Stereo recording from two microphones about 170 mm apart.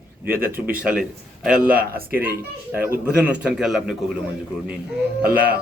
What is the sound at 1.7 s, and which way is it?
Speech, 60° right (ahead or behind).